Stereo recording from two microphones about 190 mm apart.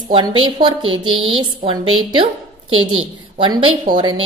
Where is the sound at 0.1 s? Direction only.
25° right (ahead or behind).